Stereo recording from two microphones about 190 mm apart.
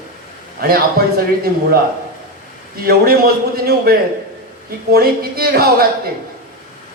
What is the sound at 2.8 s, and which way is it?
A man's voice, 50° right (ahead or behind).